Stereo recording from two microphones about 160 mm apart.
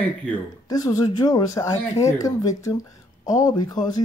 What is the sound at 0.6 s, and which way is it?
Speech, 20° left (ahead or behind).